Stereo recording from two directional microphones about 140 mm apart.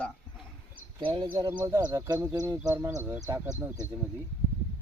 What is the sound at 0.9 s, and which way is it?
Speech, 35° right (ahead or behind).